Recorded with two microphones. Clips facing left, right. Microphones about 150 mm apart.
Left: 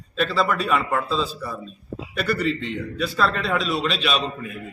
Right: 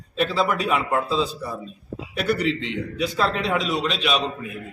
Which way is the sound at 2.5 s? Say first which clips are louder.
Even; 80° right.